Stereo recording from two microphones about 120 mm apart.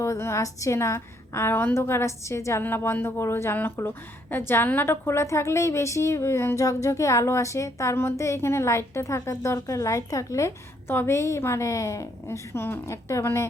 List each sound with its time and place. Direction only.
0.0 s a woman's voice: 25° left (ahead or behind)